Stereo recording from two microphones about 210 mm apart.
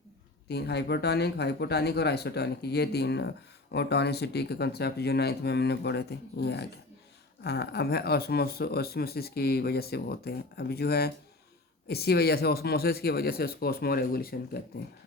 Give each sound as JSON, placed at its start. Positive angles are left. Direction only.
{"t": 0.4, "sound": "speech", "side_deg": 50}